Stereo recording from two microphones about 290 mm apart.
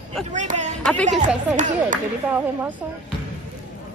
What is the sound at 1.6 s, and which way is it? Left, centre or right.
Speech, right.